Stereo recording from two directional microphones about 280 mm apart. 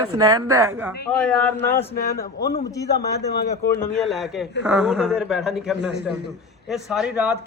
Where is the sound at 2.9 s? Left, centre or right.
Left.